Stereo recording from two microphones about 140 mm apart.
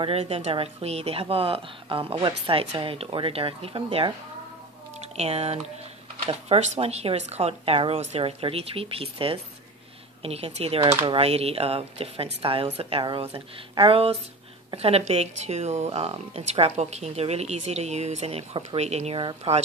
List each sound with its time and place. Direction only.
0.0 s speech: 45° right (ahead or behind)
5.1 s speech: 45° right (ahead or behind)
6.7 s speech: 50° right (ahead or behind)